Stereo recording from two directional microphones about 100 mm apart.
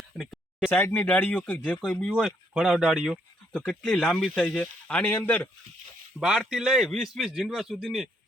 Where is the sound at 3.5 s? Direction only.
10° left (ahead or behind).